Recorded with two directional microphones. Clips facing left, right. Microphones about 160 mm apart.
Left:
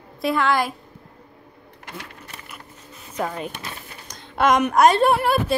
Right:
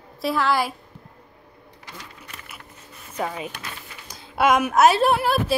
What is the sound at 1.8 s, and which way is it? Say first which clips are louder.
Sewing machine: left 5 dB; 60° left (ahead or behind).